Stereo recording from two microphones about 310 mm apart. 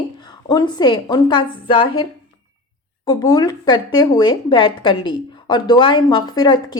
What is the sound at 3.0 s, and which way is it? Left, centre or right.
Speech, centre.